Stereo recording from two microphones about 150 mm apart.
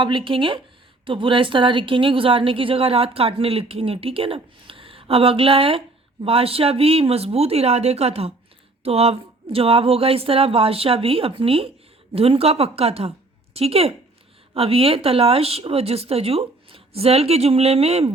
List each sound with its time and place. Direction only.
0.0 s a woman's voice: 35° right (ahead or behind)